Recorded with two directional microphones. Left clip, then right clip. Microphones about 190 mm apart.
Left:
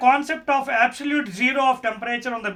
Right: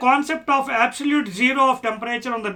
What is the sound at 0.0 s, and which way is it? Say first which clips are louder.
Speech: even; 5° right (ahead or behind).